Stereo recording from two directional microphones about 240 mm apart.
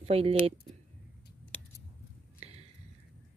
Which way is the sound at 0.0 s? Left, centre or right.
Right.